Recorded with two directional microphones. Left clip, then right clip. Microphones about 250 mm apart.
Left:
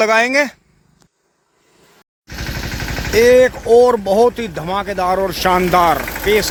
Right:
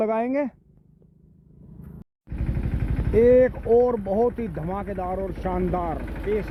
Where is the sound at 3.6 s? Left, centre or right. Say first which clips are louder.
Left 9 dB; left.